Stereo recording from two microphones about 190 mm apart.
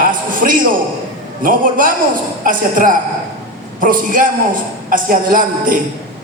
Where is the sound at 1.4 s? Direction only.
45° right (ahead or behind).